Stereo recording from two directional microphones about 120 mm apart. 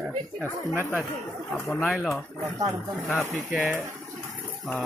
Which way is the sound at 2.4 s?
25° right (ahead or behind).